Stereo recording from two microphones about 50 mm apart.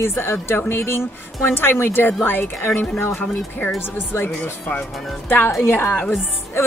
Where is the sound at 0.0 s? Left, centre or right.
Left.